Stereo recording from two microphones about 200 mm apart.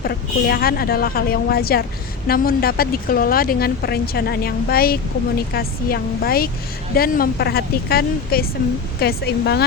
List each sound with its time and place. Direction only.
0.0 s speech: 50° left (ahead or behind)